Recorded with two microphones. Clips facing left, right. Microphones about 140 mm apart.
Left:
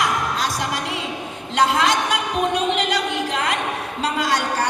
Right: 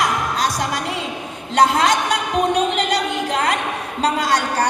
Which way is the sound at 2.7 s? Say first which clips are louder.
Right 2 dB; 40° right (ahead or behind).